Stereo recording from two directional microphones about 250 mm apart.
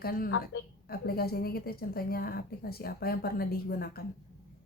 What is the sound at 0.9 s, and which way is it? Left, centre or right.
A woman's voice, left.